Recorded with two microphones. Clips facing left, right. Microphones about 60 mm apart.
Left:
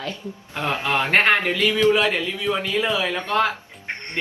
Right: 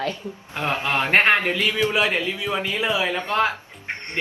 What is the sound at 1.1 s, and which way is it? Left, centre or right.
Speech, centre.